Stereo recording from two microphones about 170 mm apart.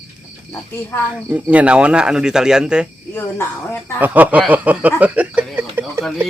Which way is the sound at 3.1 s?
15° left (ahead or behind).